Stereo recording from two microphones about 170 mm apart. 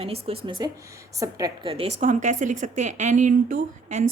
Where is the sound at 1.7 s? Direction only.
35° right (ahead or behind).